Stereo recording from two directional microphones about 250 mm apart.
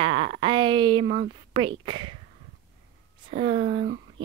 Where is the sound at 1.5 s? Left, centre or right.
Centre.